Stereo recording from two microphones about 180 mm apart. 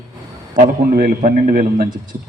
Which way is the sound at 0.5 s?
50° right (ahead or behind).